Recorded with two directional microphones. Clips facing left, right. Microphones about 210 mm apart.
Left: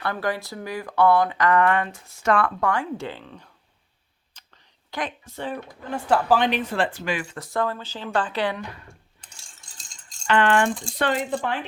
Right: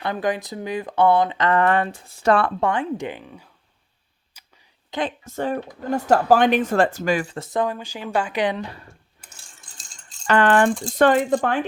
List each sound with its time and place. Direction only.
0.0 s speech: 20° right (ahead or behind)
4.4 s a sound: 10° right (ahead or behind)
5.2 s speech: 45° right (ahead or behind)
7.3 s speech: 20° right (ahead or behind)
8.5 s speech: 30° right (ahead or behind)
10.2 s speech: 40° right (ahead or behind)